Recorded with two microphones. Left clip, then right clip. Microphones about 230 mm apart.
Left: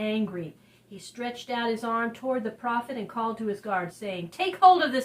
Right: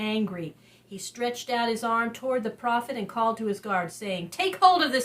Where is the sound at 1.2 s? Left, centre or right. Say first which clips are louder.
Right 3 dB; right.